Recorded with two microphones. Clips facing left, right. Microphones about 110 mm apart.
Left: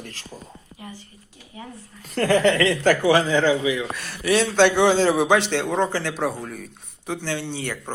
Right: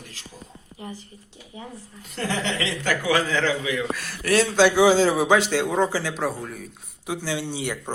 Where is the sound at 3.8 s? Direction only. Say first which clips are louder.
Right 1 dB; centre (ahead or behind).